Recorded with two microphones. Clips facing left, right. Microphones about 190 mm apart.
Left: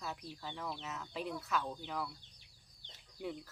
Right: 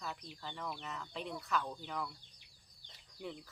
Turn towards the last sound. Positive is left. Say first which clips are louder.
# left 3 dB
turn(degrees=5)  # may be behind; listen again after turning